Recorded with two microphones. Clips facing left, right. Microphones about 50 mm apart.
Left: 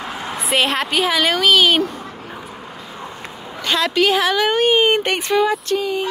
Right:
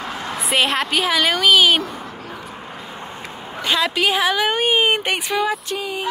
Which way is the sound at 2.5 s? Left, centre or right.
Right.